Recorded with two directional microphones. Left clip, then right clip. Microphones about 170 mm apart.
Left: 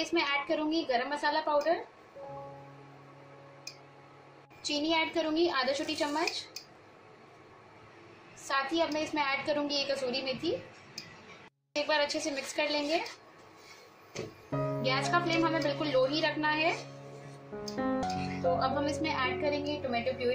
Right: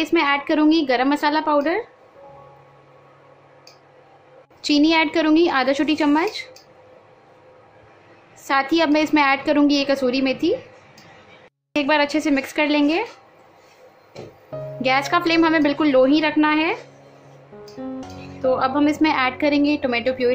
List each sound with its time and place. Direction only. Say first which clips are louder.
0.0 s a woman's voice: right 11 dB; 50° right (ahead or behind)
4.6 s a woman's voice: right 13 dB; 50° right (ahead or behind)
8.5 s a woman's voice: right 12 dB; 50° right (ahead or behind)
11.7 s a woman's voice: right 11 dB; 45° right (ahead or behind)
14.8 s a woman's voice: right 12 dB; 50° right (ahead or behind)
18.6 s a woman's voice: right 12 dB; 50° right (ahead or behind)